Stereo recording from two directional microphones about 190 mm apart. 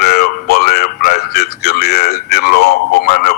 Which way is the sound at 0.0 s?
55° left (ahead or behind).